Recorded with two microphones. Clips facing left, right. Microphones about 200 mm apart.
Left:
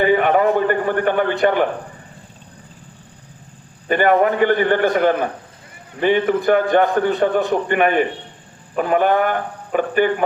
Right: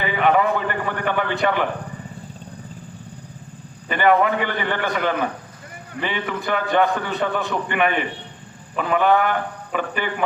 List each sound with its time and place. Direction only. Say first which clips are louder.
0.0 s a man's voice: left 4 dB; 45° left (ahead or behind)
3.8 s a man's voice: left 3 dB; 45° left (ahead or behind)